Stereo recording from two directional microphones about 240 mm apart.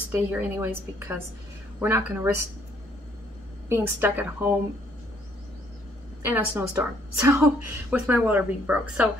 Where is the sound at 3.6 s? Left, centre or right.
Centre.